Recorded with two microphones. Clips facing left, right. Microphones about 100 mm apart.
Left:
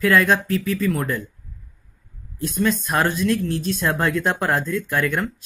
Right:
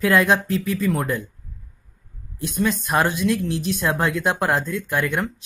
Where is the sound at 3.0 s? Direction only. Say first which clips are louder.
Even; 15° right (ahead or behind).